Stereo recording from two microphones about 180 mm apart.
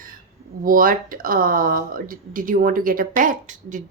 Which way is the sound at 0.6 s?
50° right (ahead or behind).